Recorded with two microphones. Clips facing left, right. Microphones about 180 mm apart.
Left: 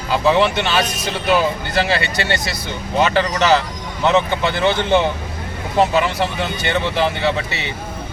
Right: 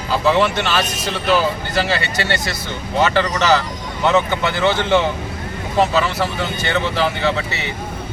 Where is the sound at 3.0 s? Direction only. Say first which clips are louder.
Even; 20° left (ahead or behind).